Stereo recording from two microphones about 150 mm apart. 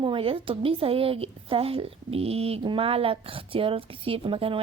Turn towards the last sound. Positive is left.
turn(degrees=-35)  # may be behind; listen again after turning